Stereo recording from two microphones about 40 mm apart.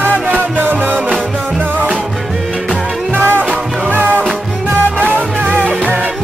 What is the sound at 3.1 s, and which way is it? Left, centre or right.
Music, right.